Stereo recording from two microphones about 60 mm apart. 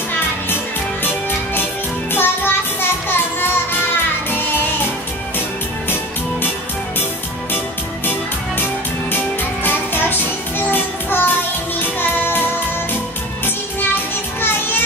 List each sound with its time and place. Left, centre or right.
1.0 s music: left
9.1 s music: left